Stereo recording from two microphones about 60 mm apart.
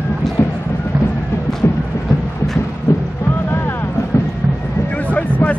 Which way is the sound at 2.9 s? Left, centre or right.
Left.